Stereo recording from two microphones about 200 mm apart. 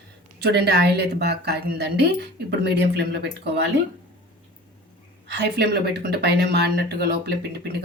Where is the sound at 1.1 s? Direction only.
55° right (ahead or behind).